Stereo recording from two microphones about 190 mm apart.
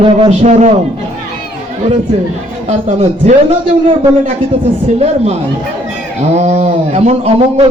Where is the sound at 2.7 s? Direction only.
35° right (ahead or behind).